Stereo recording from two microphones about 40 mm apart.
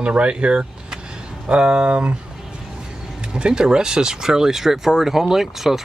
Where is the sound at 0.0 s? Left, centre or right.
Right.